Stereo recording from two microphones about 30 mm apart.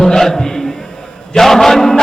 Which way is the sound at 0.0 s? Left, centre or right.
Centre.